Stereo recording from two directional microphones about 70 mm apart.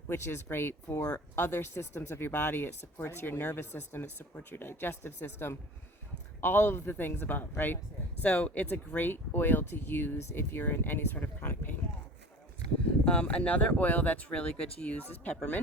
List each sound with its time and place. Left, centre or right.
0.1 s speech: left
13.1 s speech: centre
14.9 s speech: left